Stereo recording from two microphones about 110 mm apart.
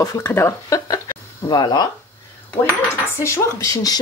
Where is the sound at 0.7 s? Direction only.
35° left (ahead or behind).